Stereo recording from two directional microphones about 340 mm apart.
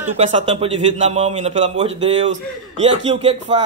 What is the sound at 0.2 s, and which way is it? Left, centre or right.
Speech, centre.